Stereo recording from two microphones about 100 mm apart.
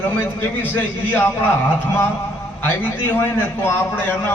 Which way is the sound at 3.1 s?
20° left (ahead or behind).